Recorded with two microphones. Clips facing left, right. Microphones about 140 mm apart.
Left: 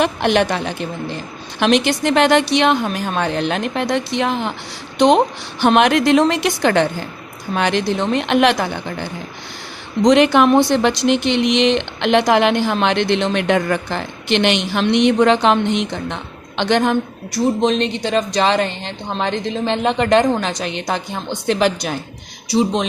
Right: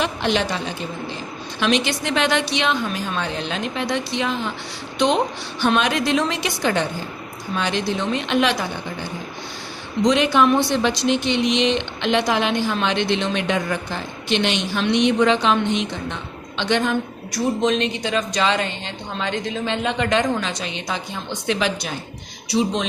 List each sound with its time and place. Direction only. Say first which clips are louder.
0.0 s a woman's voice: left 6 dB; 60° left (ahead or behind)
10.0 s a woman's voice: left 5 dB; 70° left (ahead or behind)
16.6 s a woman's voice: left 4 dB; 45° left (ahead or behind)
17.3 s speech: left 4 dB; 30° left (ahead or behind)
20.7 s a woman's voice: left 5 dB; 60° left (ahead or behind)
21.2 s speech: left 6 dB; 40° left (ahead or behind)